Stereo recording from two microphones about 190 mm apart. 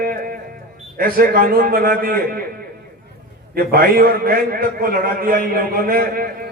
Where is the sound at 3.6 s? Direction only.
50° right (ahead or behind).